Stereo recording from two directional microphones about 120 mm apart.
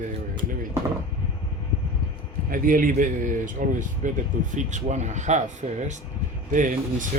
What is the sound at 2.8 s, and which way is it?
Speech, 90° right.